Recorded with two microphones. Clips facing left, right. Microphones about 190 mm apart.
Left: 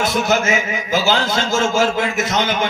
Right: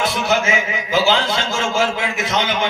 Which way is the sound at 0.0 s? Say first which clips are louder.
Left 1 dB; 45° left (ahead or behind).